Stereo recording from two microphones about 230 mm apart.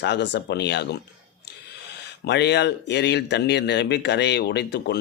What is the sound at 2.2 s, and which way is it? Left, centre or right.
Speech, left.